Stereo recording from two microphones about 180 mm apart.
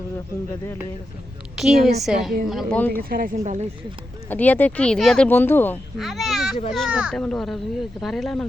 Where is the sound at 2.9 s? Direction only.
55° right (ahead or behind).